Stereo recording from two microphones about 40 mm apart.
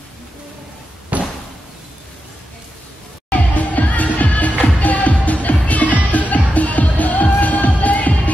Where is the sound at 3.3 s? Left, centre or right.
Left.